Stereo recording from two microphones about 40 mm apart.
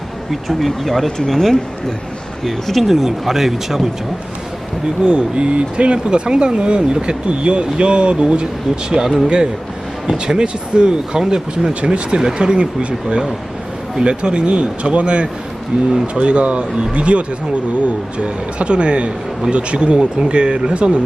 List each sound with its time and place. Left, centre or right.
0.3 s speech: centre
5.0 s speech: right
11.7 s speech: right
12.1 s speech: centre